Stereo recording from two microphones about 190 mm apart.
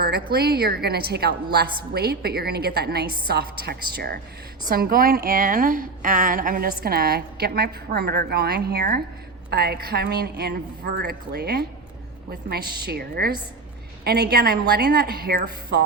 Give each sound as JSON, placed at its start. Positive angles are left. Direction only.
{"t": 0.0, "sound": "a woman's voice", "side_deg": -55}